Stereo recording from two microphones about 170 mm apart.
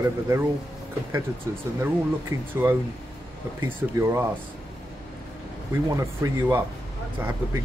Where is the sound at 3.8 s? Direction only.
15° right (ahead or behind).